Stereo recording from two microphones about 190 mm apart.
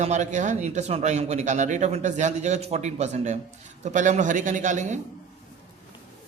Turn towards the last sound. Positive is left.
turn(degrees=-40)  # may be behind; listen again after turning